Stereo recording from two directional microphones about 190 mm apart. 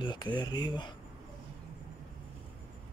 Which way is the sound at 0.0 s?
25° left (ahead or behind).